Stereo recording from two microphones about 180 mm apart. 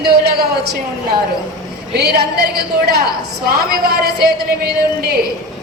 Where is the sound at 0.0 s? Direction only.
60° right (ahead or behind).